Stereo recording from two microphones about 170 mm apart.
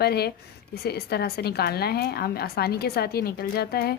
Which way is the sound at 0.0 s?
70° left (ahead or behind).